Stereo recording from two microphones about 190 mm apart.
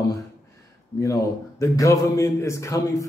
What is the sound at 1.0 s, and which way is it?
A man's voice, 15° left (ahead or behind).